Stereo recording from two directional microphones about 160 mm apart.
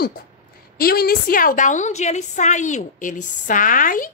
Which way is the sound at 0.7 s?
70° left (ahead or behind).